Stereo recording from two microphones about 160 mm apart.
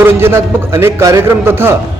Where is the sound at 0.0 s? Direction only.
15° right (ahead or behind).